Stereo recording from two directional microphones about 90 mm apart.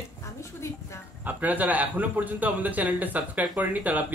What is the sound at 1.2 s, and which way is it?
A man's voice, 20° right (ahead or behind).